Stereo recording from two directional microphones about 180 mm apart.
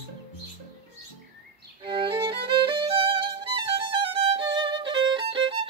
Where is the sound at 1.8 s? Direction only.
30° right (ahead or behind).